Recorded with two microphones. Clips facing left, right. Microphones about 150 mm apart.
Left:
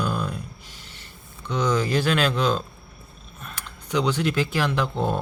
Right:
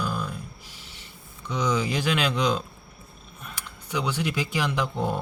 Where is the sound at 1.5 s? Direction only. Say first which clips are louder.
Left 3 dB; 10° right (ahead or behind).